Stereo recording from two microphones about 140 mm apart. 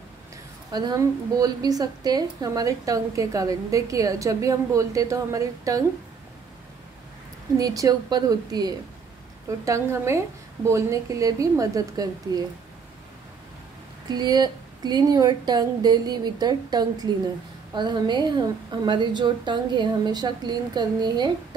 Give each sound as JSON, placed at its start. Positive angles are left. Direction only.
{"t": 0.7, "sound": "a woman's voice", "side_deg": -30}
{"t": 7.5, "sound": "a woman's voice", "side_deg": -25}
{"t": 14.0, "sound": "a woman's voice", "side_deg": -30}